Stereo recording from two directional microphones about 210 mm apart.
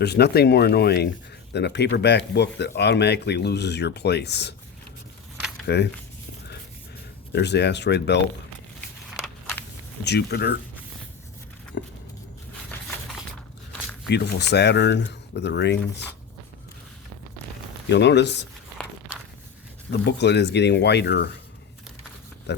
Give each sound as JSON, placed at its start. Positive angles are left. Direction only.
{"t": 0.0, "sound": "speech", "side_deg": 50}
{"t": 5.6, "sound": "speech", "side_deg": 55}
{"t": 7.3, "sound": "speech", "side_deg": 55}
{"t": 10.0, "sound": "speech", "side_deg": 50}
{"t": 11.7, "sound": "speech", "side_deg": 55}
{"t": 14.1, "sound": "speech", "side_deg": 50}
{"t": 17.9, "sound": "speech", "side_deg": 55}
{"t": 19.9, "sound": "speech", "side_deg": 55}
{"t": 22.5, "sound": "oink", "side_deg": 55}